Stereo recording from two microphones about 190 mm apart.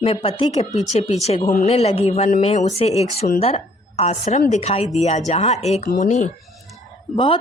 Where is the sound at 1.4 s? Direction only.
50° left (ahead or behind).